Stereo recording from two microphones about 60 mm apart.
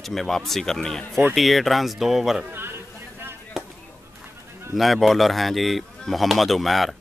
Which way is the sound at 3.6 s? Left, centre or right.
Centre.